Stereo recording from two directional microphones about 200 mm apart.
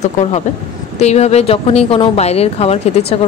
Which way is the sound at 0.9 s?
35° left (ahead or behind).